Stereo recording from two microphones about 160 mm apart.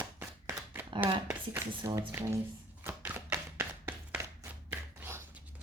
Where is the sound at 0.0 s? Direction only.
15° right (ahead or behind).